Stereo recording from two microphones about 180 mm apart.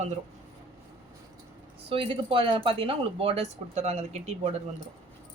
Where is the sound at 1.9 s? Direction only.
30° right (ahead or behind).